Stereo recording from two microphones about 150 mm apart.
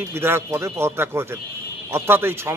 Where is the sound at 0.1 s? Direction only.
15° right (ahead or behind).